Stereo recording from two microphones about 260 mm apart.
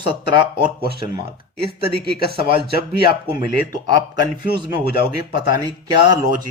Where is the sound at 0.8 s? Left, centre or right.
Left.